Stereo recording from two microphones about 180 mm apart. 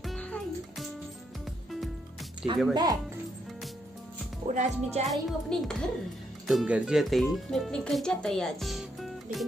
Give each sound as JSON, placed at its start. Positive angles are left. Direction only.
{"t": 0.0, "sound": "music", "side_deg": 5}
{"t": 2.7, "sound": "speech", "side_deg": -20}
{"t": 4.5, "sound": "speech", "side_deg": -40}
{"t": 5.0, "sound": "speech", "side_deg": 0}